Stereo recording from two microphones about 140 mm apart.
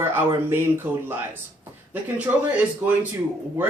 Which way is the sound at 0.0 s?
15° right (ahead or behind).